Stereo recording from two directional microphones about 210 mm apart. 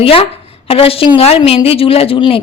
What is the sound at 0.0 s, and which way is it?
A woman's voice, 25° left (ahead or behind).